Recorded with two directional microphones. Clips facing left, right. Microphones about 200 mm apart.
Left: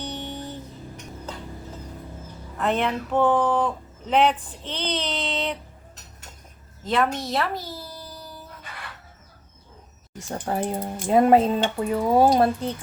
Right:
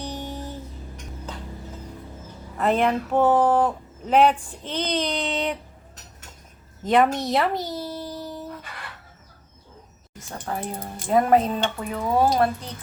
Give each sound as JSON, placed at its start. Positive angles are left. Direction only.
{"t": 0.0, "sound": "music", "side_deg": -10}
{"t": 2.6, "sound": "speech", "side_deg": -5}
{"t": 6.8, "sound": "speech", "side_deg": -15}
{"t": 10.3, "sound": "speech", "side_deg": 30}